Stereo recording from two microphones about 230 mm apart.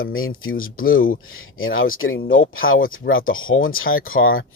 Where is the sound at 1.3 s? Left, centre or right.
Left.